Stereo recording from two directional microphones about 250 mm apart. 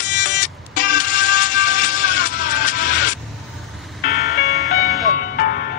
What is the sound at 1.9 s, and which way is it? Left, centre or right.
Music, left.